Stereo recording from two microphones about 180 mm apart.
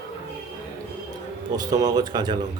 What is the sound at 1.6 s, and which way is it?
Speech, 20° right (ahead or behind).